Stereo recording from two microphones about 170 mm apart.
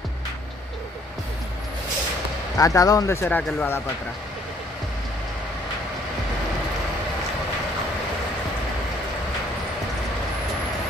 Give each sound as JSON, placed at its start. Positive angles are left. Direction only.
{"t": 2.5, "sound": "speech", "side_deg": 20}